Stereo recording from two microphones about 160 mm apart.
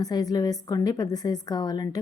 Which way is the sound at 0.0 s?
25° left (ahead or behind).